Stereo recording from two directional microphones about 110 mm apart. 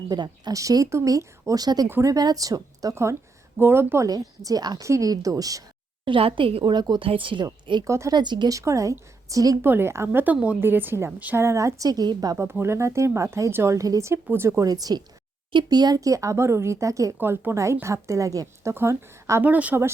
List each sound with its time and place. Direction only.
0.1 s a woman's voice: 40° right (ahead or behind)
6.1 s a woman's voice: 55° right (ahead or behind)
7.1 s a woman's voice: 50° right (ahead or behind)
7.9 s speech: 25° right (ahead or behind)
8.1 s a woman's voice: 40° right (ahead or behind)
8.5 s speech: 30° right (ahead or behind)
9.6 s speech: 20° right (ahead or behind); by 12.4 s 35° right (ahead or behind)
12.4 s speech: 25° right (ahead or behind)
17.2 s speech: 20° right (ahead or behind)